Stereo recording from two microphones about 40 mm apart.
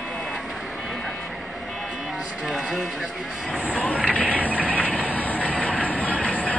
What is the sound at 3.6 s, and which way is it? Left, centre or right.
Vehicle, left.